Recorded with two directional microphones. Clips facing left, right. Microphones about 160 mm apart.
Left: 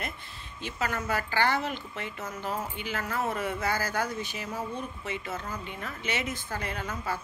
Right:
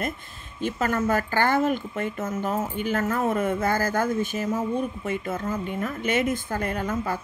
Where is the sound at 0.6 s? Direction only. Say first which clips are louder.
Right 8 dB; 50° right (ahead or behind).